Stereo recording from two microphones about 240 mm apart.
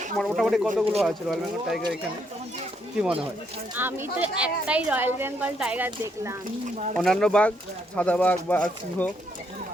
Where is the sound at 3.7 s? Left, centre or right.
Centre.